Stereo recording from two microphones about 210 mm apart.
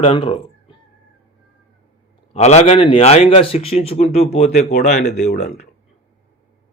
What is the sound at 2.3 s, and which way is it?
A man's voice, 30° left (ahead or behind).